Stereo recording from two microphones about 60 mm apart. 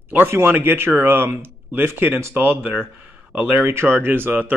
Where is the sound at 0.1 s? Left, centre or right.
Right.